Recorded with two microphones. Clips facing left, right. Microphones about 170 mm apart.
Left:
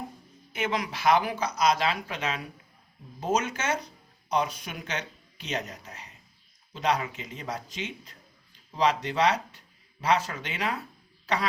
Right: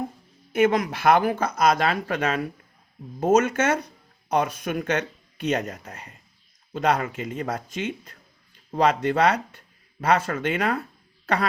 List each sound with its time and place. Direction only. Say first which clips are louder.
0.5 s speech: right 10 dB; 50° right (ahead or behind)